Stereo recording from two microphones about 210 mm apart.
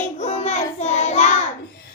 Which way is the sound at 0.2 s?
30° left (ahead or behind).